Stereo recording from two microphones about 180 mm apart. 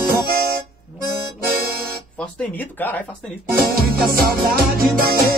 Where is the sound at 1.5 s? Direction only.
55° right (ahead or behind).